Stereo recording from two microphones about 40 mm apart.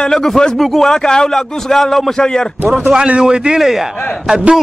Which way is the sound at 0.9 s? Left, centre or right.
Centre.